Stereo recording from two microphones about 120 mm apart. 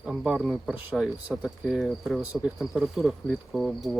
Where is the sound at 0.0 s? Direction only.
5° right (ahead or behind).